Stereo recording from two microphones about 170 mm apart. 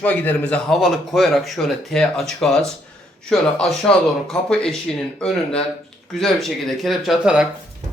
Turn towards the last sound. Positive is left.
turn(degrees=-5)  # may be behind; listen again after turning